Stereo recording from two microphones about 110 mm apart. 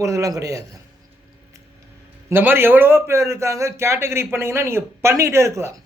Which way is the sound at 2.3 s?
20° right (ahead or behind).